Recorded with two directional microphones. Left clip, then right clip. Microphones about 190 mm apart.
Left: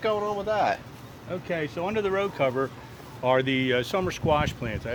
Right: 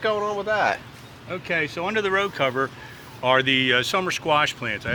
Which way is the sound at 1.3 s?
5° left (ahead or behind).